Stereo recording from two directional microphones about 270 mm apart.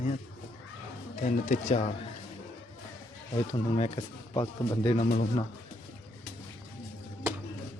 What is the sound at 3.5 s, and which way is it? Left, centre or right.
Speech, left.